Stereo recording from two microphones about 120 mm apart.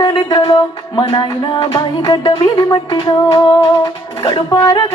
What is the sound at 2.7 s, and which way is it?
Speech, 45° left (ahead or behind).